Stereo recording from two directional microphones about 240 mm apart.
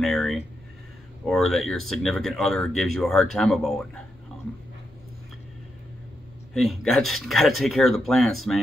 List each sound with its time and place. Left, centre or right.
0.0 s speech: centre
6.5 s speech: centre